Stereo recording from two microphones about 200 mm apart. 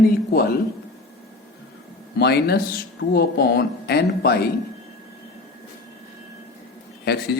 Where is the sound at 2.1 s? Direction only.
55° left (ahead or behind).